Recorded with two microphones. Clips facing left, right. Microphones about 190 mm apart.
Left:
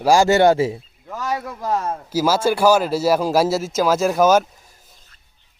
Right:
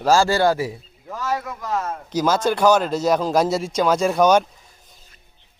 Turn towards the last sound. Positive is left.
turn(degrees=5)  # may be behind; listen again after turning